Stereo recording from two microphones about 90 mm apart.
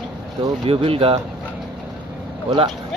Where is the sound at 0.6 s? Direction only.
90° right.